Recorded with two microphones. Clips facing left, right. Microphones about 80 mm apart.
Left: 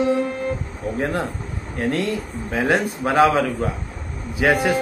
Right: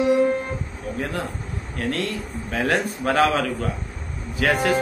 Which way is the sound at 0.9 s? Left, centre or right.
Left.